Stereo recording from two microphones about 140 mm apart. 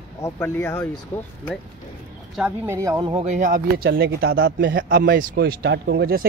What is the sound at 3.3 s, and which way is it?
Speech, 65° right (ahead or behind).